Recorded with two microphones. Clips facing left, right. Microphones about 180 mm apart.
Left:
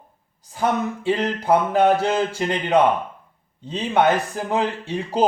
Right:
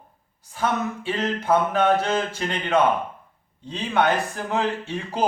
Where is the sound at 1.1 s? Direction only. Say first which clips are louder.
Left 3 dB; 35° left (ahead or behind).